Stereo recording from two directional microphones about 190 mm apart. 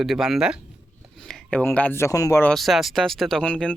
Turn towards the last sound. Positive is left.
turn(degrees=5)  # may be behind; listen again after turning